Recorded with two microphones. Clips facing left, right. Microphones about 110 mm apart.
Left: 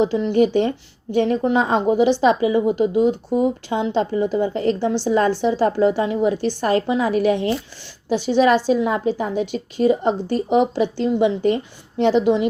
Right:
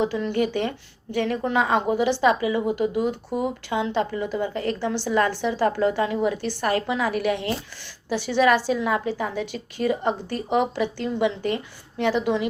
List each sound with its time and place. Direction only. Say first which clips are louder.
0.0 s a woman's voice: left 6 dB; 25° left (ahead or behind)